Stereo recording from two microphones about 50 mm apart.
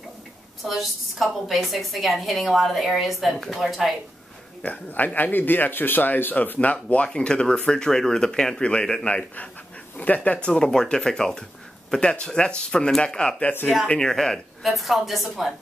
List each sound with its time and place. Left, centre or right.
0.7 s a woman's voice: centre
4.6 s speech: left
7.1 s speech: centre
9.1 s speech: left
13.4 s speech: left
13.8 s speech: centre
14.6 s a woman's voice: centre